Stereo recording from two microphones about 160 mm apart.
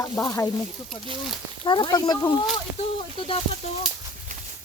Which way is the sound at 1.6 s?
30° left (ahead or behind).